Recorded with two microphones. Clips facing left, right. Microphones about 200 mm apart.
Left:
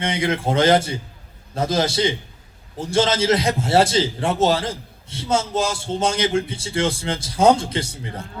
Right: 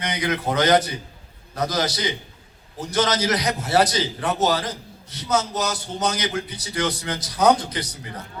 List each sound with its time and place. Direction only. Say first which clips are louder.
0.0 s a man's voice: left 3 dB; 25° left (ahead or behind)